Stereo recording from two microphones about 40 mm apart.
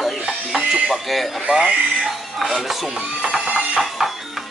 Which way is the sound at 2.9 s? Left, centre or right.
Centre.